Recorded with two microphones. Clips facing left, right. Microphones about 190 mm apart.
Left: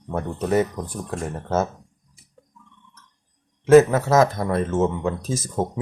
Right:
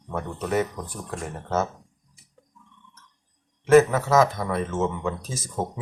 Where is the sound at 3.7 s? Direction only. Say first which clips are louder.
Left 3 dB; 40° left (ahead or behind).